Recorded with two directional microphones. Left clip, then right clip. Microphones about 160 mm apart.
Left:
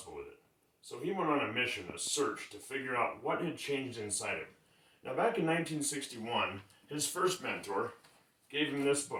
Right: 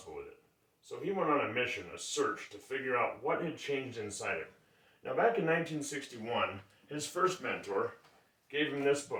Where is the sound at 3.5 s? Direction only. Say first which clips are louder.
Even; 15° right (ahead or behind).